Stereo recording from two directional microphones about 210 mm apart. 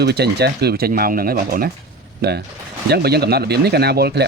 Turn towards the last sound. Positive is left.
turn(degrees=-50)  # may be behind; listen again after turning